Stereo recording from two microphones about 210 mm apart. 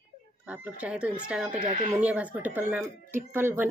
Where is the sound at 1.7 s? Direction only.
25° right (ahead or behind).